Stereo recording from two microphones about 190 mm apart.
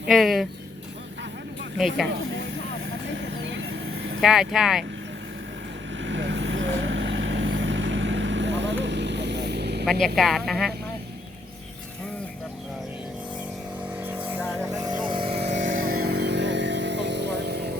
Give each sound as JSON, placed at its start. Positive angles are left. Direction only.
{"t": 0.1, "sound": "speech", "side_deg": 0}
{"t": 3.4, "sound": "vehicle", "side_deg": -70}
{"t": 4.2, "sound": "speech", "side_deg": 0}
{"t": 6.0, "sound": "vehicle", "side_deg": -75}
{"t": 9.8, "sound": "speech", "side_deg": 0}
{"t": 14.2, "sound": "music", "side_deg": -10}
{"t": 14.7, "sound": "vehicle", "side_deg": -20}
{"t": 15.8, "sound": "vehicle", "side_deg": -50}